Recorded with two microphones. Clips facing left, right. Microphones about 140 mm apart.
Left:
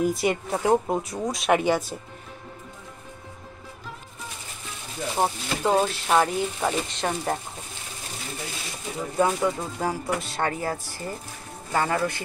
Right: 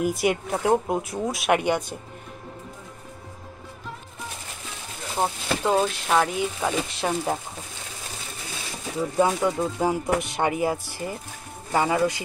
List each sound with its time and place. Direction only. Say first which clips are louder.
0.0 s speech: even; centre (ahead or behind)
5.1 s speech: right 1 dB; 5° left (ahead or behind)
9.2 s speech: right 1 dB; 15° right (ahead or behind)